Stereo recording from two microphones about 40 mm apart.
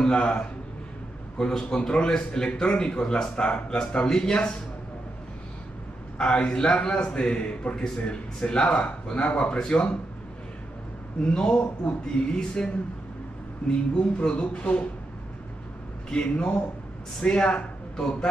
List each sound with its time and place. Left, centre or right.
0.1 s a man's voice: left
1.5 s a man's voice: centre
6.1 s a man's voice: left
11.2 s a man's voice: left
16.1 s a man's voice: left